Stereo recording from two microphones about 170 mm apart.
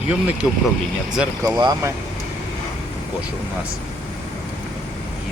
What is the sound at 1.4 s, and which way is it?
Speech, 20° right (ahead or behind).